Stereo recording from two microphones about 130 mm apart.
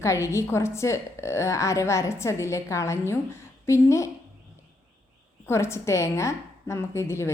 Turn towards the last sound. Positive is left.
turn(degrees=20)  # may be behind; listen again after turning